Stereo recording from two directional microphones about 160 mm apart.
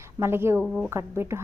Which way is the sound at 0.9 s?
15° right (ahead or behind).